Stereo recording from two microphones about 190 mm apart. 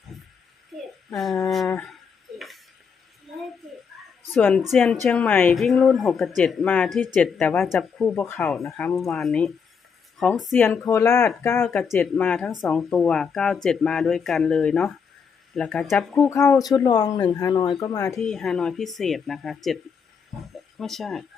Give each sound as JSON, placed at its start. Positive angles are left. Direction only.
{"t": 1.1, "sound": "speech", "side_deg": 0}
{"t": 4.4, "sound": "speech", "side_deg": 5}
{"t": 16.3, "sound": "speech", "side_deg": 15}
{"t": 18.2, "sound": "speech", "side_deg": 0}